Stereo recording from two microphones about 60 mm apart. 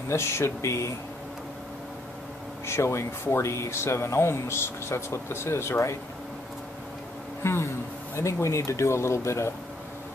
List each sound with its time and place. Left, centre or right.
0.1 s speech: left
2.6 s speech: left
7.4 s speech: left